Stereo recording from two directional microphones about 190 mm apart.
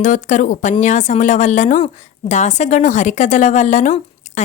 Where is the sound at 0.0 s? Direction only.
40° left (ahead or behind).